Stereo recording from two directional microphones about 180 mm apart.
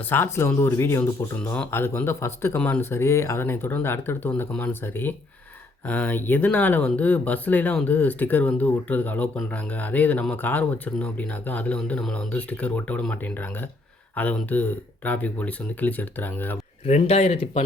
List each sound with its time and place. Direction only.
0.1 s speech: 15° left (ahead or behind)
16.8 s speech: 35° left (ahead or behind)